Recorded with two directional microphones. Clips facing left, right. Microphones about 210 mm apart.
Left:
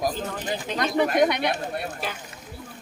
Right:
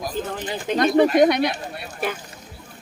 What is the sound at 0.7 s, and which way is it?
Speech, 50° right (ahead or behind).